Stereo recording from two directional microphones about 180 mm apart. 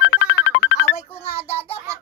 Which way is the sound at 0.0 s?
90° left.